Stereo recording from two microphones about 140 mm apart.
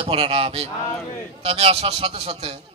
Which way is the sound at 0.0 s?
40° right (ahead or behind).